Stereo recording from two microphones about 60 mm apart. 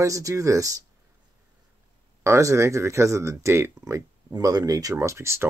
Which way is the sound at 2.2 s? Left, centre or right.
Right.